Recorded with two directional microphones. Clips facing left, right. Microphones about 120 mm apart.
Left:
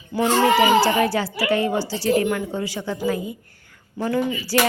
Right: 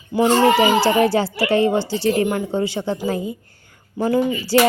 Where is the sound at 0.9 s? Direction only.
30° right (ahead or behind).